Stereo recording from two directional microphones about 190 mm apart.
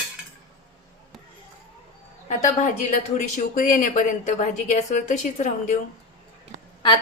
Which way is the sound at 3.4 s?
45° left (ahead or behind).